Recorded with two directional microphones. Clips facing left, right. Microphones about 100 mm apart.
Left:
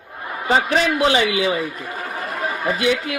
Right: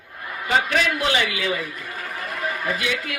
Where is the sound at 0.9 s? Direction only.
30° left (ahead or behind).